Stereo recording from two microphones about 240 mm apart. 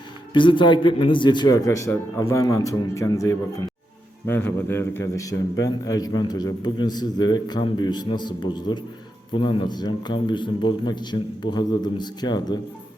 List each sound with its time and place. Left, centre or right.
0.3 s a man's voice: centre